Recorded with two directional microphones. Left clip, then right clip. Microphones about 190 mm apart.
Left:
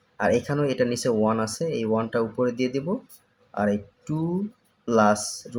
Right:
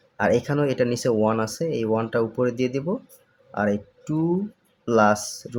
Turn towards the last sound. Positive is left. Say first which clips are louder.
# right 1 dB
turn(degrees=-15)  # may be behind; listen again after turning